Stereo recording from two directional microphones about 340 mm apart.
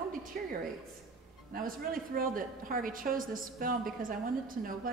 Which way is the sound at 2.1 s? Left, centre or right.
Right.